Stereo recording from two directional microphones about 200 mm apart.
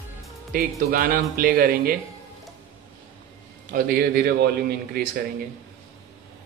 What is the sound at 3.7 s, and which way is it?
Speech, 45° right (ahead or behind).